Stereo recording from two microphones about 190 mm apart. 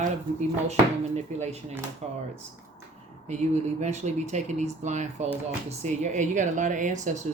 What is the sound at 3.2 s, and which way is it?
Speech, 35° right (ahead or behind).